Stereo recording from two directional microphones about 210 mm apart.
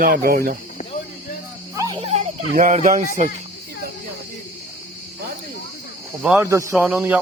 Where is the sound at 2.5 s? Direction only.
40° right (ahead or behind).